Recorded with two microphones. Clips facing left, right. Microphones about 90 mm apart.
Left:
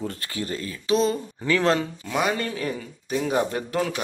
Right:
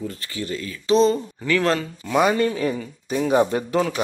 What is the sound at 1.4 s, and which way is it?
Speech, 20° left (ahead or behind).